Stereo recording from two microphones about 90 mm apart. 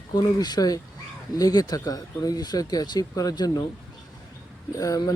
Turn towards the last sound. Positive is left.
turn(degrees=40)  # may be behind; listen again after turning